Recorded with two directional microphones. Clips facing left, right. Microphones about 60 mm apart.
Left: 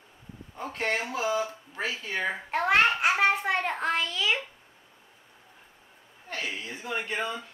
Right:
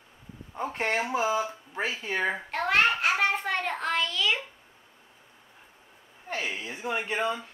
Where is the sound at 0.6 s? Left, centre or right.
Right.